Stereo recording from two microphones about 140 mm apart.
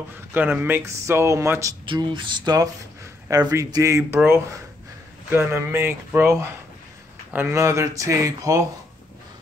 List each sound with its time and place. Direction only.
0.3 s speech: 15° right (ahead or behind)
1.9 s a sound: 35° right (ahead or behind)
3.3 s speech: 25° right (ahead or behind)
7.3 s speech: 20° right (ahead or behind)